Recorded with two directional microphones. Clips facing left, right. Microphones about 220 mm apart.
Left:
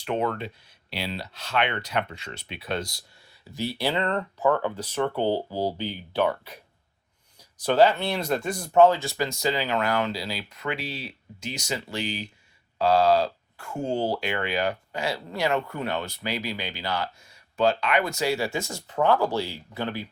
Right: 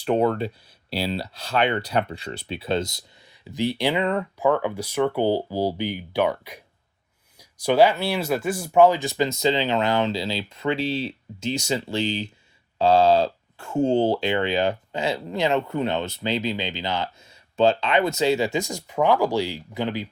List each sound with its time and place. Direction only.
0.0 s speech: 35° right (ahead or behind); by 20.1 s 15° right (ahead or behind)